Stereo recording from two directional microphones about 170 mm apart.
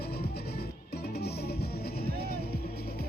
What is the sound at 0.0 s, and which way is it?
Music, 70° left (ahead or behind).